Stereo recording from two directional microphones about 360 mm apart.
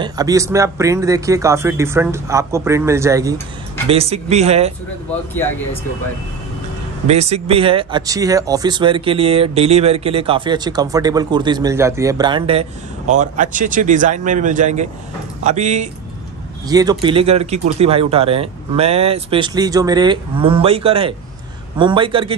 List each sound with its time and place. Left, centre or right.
0.0 s speech: centre
5.3 s speech: centre
7.1 s speech: centre